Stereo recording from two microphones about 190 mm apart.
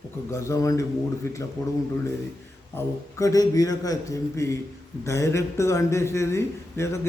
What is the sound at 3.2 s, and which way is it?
A man's voice, 20° left (ahead or behind).